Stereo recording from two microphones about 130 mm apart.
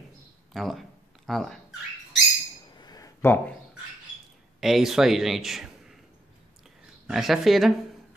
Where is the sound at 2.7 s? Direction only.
30° left (ahead or behind).